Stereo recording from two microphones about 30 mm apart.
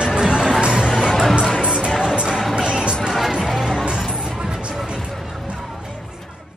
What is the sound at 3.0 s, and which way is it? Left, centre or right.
Music, centre.